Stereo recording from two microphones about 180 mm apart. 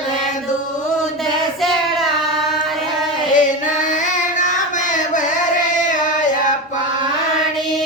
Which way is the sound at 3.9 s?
45° left (ahead or behind).